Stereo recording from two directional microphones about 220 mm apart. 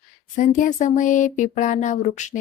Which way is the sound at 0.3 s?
35° left (ahead or behind).